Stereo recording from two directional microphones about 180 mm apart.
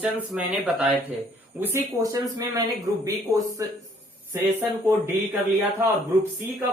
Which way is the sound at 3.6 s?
15° right (ahead or behind).